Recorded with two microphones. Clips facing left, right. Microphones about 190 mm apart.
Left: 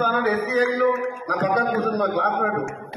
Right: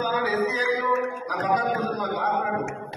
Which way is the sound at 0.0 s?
55° left (ahead or behind).